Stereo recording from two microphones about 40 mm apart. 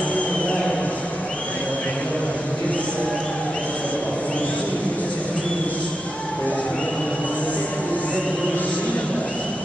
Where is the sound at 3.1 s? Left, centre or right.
Left.